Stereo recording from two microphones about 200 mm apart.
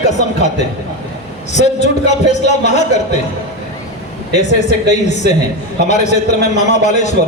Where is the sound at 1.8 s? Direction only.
35° left (ahead or behind).